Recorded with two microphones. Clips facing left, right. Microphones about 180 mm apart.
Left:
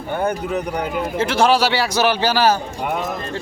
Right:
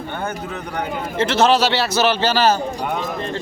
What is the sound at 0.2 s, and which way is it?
Speech, 15° left (ahead or behind).